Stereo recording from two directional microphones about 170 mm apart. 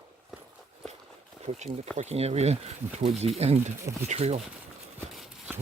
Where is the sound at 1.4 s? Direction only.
40° right (ahead or behind).